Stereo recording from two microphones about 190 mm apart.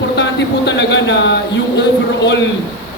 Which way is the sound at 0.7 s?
65° left (ahead or behind).